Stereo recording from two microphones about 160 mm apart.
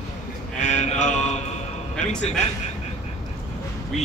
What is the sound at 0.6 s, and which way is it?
Speech, 45° left (ahead or behind).